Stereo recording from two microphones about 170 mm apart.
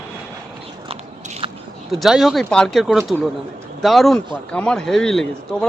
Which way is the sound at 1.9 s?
Centre (ahead or behind).